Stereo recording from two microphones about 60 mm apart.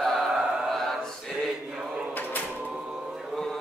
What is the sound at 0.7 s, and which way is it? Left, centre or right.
Choir, centre.